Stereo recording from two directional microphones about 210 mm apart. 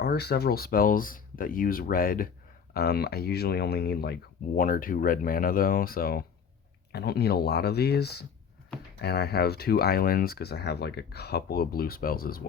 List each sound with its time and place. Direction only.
0.0 s speech: 50° left (ahead or behind)